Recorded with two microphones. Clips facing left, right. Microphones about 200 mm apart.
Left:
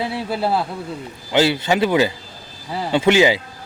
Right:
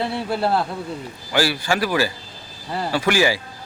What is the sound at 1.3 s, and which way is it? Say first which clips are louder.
A man's voice: left 4 dB; 20° left (ahead or behind).